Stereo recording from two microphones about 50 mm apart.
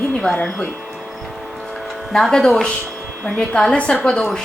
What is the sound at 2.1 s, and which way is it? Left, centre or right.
Speech, centre.